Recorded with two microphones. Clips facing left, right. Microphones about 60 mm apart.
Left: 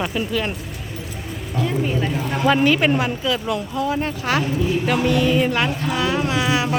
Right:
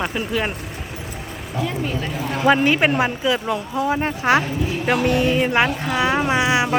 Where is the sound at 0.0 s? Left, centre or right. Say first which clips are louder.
Even; centre.